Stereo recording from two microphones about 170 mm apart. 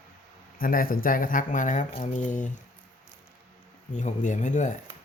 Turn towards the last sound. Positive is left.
turn(degrees=45)  # may be behind; listen again after turning